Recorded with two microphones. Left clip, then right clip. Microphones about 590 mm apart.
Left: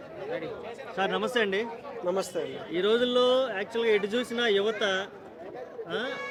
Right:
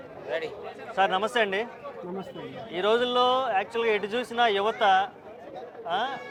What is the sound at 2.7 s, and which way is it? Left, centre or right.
Speech, right.